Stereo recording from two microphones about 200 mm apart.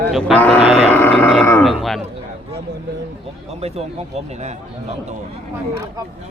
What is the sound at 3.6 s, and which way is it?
Speech, 30° right (ahead or behind).